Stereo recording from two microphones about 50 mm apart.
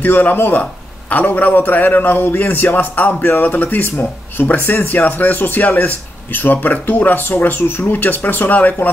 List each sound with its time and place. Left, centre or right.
0.0 s speech: left
3.9 s speech: left